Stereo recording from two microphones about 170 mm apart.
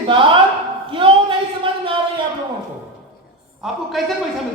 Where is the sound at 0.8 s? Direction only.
30° right (ahead or behind).